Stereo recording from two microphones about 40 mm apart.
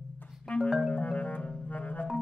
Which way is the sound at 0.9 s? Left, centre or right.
Left.